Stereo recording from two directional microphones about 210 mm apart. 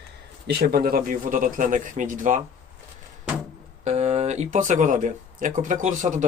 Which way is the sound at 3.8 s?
35° right (ahead or behind).